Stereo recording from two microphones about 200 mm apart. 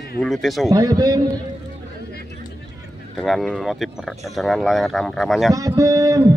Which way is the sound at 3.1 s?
Centre (ahead or behind).